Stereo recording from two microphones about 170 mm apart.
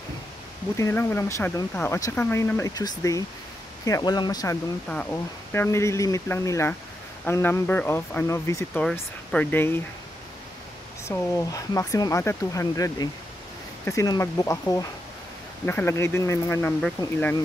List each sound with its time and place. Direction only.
0.7 s speech: 15° left (ahead or behind)
4.8 s speech: 10° left (ahead or behind)
8.7 s speech: 5° left (ahead or behind)
11.1 s speech: 15° left (ahead or behind)